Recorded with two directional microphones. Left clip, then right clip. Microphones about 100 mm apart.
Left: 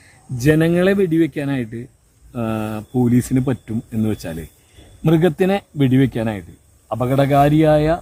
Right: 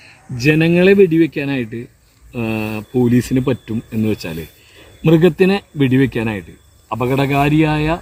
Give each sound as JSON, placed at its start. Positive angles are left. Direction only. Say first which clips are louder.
{"t": 0.3, "sound": "speech", "louder": "right 2 dB", "side_deg": 20}